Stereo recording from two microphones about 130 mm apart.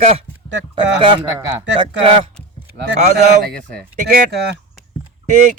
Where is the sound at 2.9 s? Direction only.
60° right (ahead or behind).